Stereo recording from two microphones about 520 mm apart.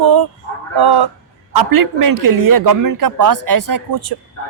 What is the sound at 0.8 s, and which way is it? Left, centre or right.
A man's voice, right.